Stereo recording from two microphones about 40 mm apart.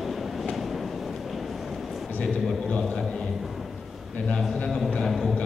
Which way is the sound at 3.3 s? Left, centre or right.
Centre.